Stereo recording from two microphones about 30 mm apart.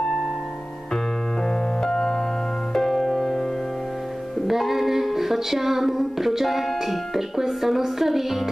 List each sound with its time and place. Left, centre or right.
1.8 s music: left
2.7 s music: centre
4.5 s music: centre